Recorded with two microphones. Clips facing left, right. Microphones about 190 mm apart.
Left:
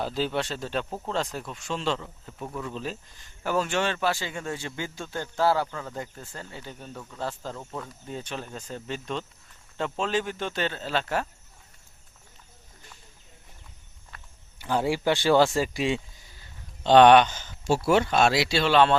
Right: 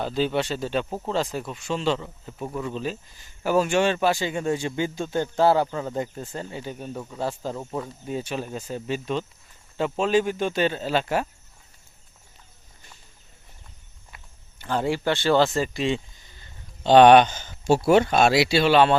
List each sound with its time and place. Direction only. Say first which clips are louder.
0.0 s speech: right 4 dB; centre (ahead or behind)
14.1 s walk: even; 10° right (ahead or behind)
14.6 s speech: right 1 dB; 10° left (ahead or behind)
16.8 s speech: right 2 dB; 10° right (ahead or behind)
17.2 s speech: right 2 dB; 45° right (ahead or behind)
17.7 s speech: right 4 dB; 20° right (ahead or behind)